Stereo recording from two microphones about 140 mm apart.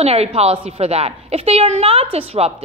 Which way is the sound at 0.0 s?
50° right (ahead or behind).